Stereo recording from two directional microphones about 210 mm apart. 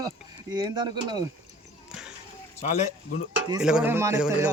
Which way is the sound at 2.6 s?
35° left (ahead or behind).